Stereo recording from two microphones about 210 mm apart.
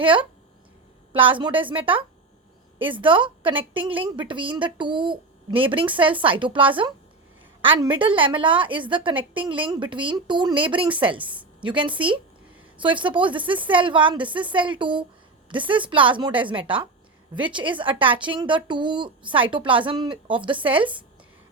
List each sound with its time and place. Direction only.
0.0 s a woman's voice: 25° right (ahead or behind)